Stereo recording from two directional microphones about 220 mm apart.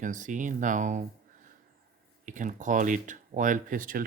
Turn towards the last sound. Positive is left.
turn(degrees=-40)  # may be behind; listen again after turning